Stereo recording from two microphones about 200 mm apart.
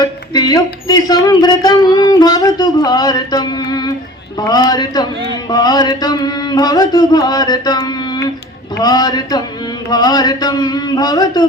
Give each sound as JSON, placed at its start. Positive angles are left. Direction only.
{"t": 0.0, "sound": "speech", "side_deg": 20}